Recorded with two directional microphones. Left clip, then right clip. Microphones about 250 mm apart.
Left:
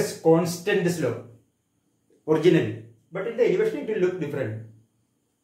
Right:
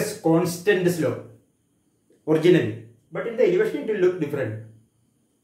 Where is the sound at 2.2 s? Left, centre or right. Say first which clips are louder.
Right 2 dB; centre.